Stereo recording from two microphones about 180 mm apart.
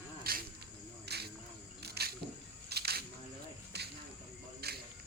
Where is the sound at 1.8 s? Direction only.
60° right (ahead or behind).